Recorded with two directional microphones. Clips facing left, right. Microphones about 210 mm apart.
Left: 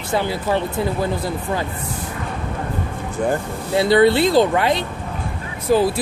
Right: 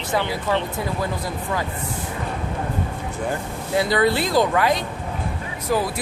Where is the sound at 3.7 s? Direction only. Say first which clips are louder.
Left 5 dB; 30° left (ahead or behind).